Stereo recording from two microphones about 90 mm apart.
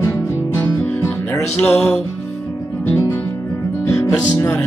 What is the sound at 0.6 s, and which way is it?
Music, 20° left (ahead or behind).